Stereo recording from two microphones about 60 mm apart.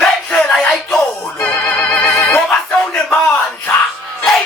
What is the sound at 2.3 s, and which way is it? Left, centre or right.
Music, centre.